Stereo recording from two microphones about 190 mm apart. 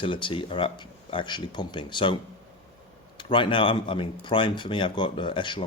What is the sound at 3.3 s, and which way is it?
Speech, 25° left (ahead or behind).